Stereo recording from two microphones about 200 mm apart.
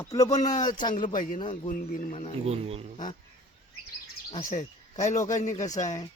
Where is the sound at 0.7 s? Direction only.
40° left (ahead or behind).